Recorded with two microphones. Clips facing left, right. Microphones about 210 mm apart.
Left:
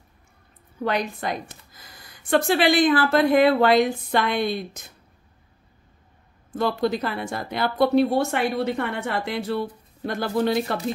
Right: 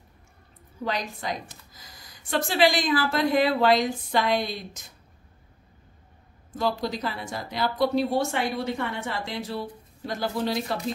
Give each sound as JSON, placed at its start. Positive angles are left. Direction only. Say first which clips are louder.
{"t": 0.8, "sound": "speech", "louder": "left 5 dB", "side_deg": 60}
{"t": 6.5, "sound": "speech", "louder": "left 4 dB", "side_deg": 60}